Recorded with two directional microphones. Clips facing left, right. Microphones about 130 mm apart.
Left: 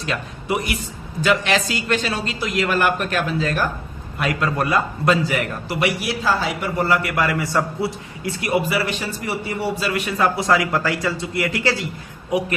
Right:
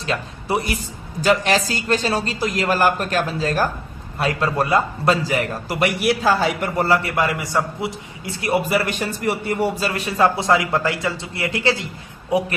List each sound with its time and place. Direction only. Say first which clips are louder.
0.0 s a man's voice: right 1 dB; 30° right (ahead or behind)
5.8 s a man's voice: right 4 dB; 60° right (ahead or behind)
6.6 s a man's voice: right 1 dB; 40° right (ahead or behind)
8.7 s a man's voice: right 2 dB; 50° right (ahead or behind); by 11.9 s 25° right (ahead or behind)